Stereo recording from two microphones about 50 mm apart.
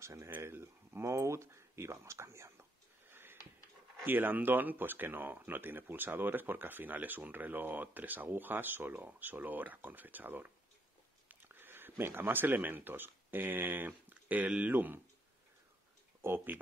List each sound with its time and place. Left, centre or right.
0.0 s speech: right
1.0 s speech: right
3.1 s sniff: right
4.0 s speech: right
16.2 s speech: right